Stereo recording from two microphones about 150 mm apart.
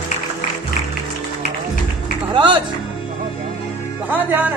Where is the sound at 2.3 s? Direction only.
30° right (ahead or behind).